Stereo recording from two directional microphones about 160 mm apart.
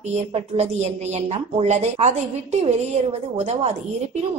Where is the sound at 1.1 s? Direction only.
40° right (ahead or behind).